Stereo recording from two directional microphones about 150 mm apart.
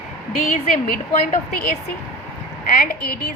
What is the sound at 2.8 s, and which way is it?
Speech, 90° left.